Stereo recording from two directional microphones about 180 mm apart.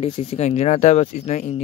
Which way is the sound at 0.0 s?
35° left (ahead or behind).